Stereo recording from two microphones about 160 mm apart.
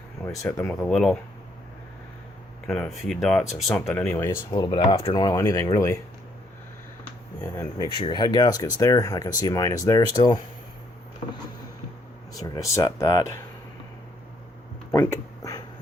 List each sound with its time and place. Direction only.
0.3 s speech: 5° left (ahead or behind)
2.6 s speech: 5° left (ahead or behind)
4.5 s speech: 30° left (ahead or behind)
7.4 s speech: 20° left (ahead or behind)
12.3 s speech: 20° left (ahead or behind)
14.9 s a sound: 20° left (ahead or behind)